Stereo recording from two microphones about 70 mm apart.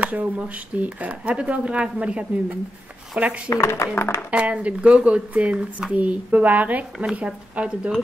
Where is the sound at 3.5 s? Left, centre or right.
Left.